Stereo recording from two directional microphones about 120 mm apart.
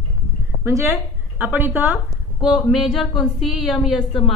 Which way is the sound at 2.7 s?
Centre (ahead or behind).